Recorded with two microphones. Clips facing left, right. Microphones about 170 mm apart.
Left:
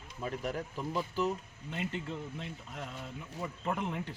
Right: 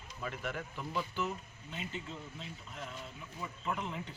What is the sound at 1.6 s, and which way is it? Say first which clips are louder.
Speech: left 6 dB; 65° left (ahead or behind).